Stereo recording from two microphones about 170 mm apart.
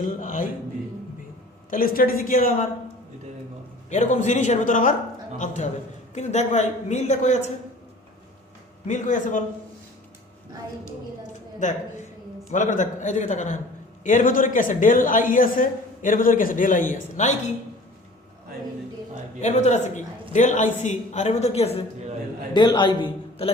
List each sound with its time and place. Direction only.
0.0 s a woman's voice: 50° left (ahead or behind)
1.7 s a woman's voice: 55° left (ahead or behind)
3.8 s a woman's voice: 45° left (ahead or behind)
6.1 s a woman's voice: 45° left (ahead or behind)
8.9 s a woman's voice: 50° left (ahead or behind)
11.6 s a woman's voice: 45° left (ahead or behind)
19.4 s a woman's voice: 45° left (ahead or behind)
22.5 s a man's voice: 25° left (ahead or behind)